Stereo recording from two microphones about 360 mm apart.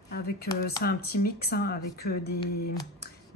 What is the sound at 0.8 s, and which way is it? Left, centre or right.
Speech, left.